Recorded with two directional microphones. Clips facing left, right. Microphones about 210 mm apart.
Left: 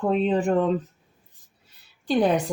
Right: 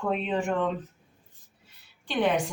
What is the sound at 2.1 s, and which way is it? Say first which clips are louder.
Speech: left 5 dB; 35° left (ahead or behind).